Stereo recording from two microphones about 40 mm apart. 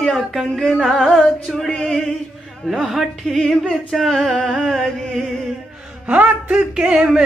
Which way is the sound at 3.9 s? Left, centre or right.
Centre.